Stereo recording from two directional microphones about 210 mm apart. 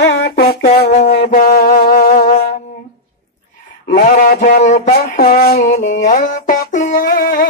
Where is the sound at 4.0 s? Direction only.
40° left (ahead or behind).